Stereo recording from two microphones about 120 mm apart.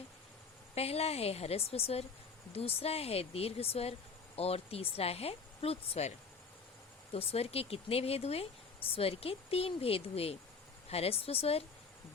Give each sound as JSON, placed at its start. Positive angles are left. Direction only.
{"t": 0.8, "sound": "speech", "side_deg": 60}